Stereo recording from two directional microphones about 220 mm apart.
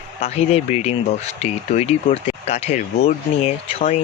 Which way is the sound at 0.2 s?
30° left (ahead or behind).